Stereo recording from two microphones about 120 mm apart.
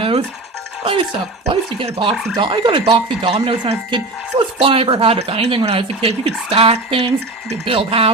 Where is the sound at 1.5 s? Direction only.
50° right (ahead or behind).